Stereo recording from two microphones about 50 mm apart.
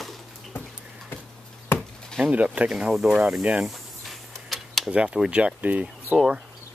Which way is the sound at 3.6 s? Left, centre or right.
Centre.